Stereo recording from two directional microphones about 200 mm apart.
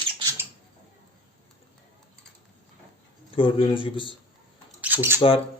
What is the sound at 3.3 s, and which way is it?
Speech, 25° left (ahead or behind).